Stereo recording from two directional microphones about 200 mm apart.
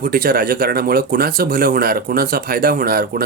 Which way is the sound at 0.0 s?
45° right (ahead or behind).